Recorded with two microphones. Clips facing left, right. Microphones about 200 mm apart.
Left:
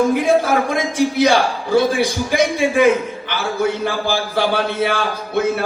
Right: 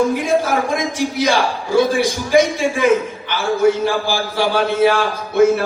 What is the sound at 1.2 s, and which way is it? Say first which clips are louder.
A man's voice: left 1 dB; 60° left (ahead or behind).